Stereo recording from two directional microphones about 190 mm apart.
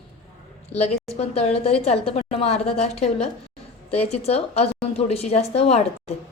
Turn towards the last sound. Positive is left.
turn(degrees=35)  # may be behind; listen again after turning